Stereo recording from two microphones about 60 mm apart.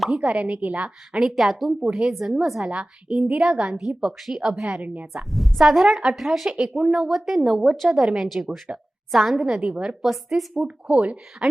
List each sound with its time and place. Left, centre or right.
0.2 s a woman's voice: right
1.2 s speech: centre
3.3 s a woman's voice: centre
9.6 s a woman's voice: centre
10.9 s a woman's voice: right